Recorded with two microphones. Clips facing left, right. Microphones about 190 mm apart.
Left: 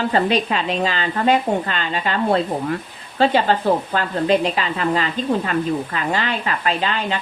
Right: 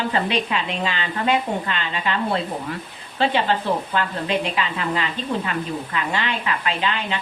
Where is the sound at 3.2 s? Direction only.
40° left (ahead or behind).